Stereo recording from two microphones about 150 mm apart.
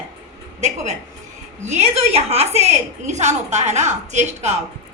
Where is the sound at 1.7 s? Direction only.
45° right (ahead or behind).